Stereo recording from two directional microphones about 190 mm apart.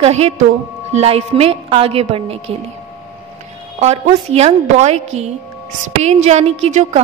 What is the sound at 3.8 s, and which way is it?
A woman's voice, 35° right (ahead or behind).